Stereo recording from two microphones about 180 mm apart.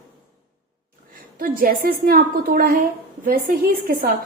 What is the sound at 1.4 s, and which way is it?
A woman's voice, 55° right (ahead or behind).